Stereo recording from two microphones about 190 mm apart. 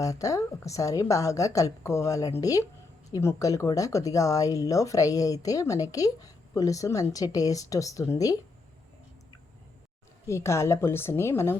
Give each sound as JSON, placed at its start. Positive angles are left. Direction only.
{"t": 0.0, "sound": "speech", "side_deg": 15}
{"t": 10.2, "sound": "speech", "side_deg": 15}